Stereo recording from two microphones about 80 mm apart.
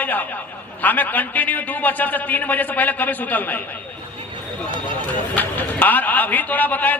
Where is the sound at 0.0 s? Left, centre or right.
Left.